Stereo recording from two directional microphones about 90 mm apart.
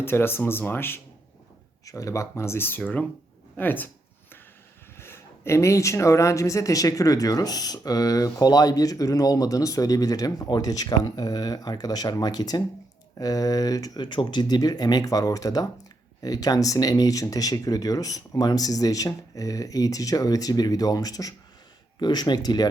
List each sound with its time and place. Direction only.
0.0 s speech: 25° left (ahead or behind)
1.8 s speech: 40° left (ahead or behind); by 3.8 s 20° left (ahead or behind)
4.9 s speech: 30° left (ahead or behind); by 22.7 s 50° left (ahead or behind)